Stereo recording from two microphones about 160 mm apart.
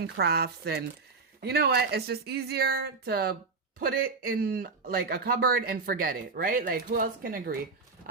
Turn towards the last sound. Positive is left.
turn(degrees=-65)  # may be behind; listen again after turning